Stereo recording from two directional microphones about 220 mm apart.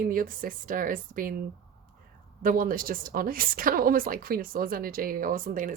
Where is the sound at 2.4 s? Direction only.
40° right (ahead or behind).